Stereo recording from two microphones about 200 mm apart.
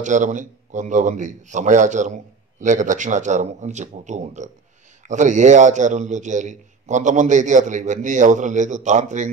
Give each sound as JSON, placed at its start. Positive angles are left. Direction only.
{"t": 0.0, "sound": "a man's voice", "side_deg": -40}